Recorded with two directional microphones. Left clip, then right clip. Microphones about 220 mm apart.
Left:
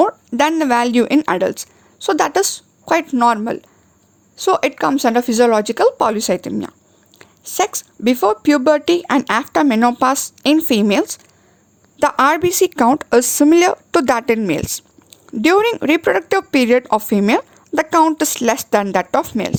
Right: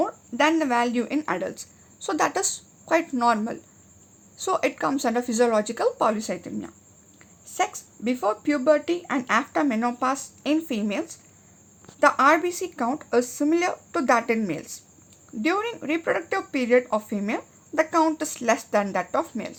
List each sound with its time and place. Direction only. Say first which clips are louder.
0.0 s speech: left 8 dB; 45° left (ahead or behind)